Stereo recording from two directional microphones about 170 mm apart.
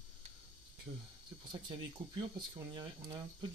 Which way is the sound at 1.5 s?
25° right (ahead or behind).